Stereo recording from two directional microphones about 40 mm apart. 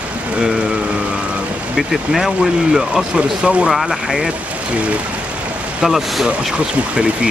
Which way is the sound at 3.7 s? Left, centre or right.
Centre.